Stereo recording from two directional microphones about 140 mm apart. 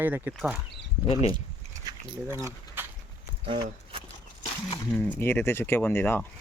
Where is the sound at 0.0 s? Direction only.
15° right (ahead or behind).